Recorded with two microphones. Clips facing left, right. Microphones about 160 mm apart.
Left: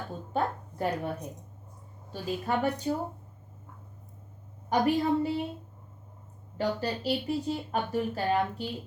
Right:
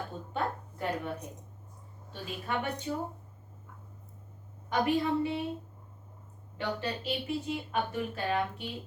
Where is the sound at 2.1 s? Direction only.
40° left (ahead or behind).